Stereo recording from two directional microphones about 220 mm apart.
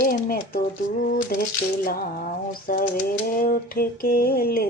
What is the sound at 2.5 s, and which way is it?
Typewriter, 40° left (ahead or behind).